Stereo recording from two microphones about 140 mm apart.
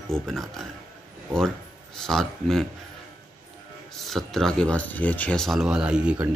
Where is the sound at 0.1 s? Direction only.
Centre (ahead or behind).